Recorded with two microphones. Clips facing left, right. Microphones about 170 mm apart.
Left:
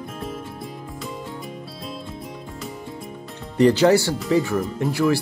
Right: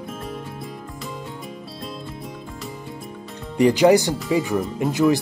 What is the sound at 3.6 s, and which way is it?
Speech, 15° right (ahead or behind).